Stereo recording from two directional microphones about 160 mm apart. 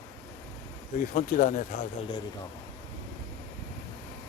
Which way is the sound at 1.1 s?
55° left (ahead or behind).